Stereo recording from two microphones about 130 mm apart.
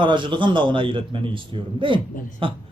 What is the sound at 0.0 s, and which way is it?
A man's voice, 35° right (ahead or behind).